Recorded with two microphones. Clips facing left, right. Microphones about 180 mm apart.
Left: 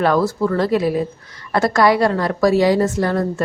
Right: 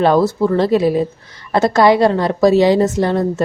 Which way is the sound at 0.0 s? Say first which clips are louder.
Right 4 dB; 25° right (ahead or behind).